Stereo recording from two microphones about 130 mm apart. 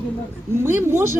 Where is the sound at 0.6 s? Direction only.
20° right (ahead or behind).